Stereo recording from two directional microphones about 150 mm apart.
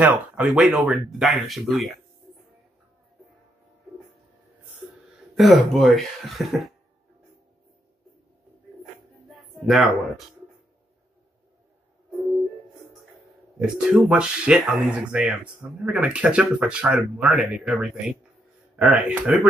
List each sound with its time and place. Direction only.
0.0 s speech: 5° right (ahead or behind)
5.3 s speech: centre (ahead or behind)
9.7 s speech: centre (ahead or behind)
13.6 s speech: 5° right (ahead or behind)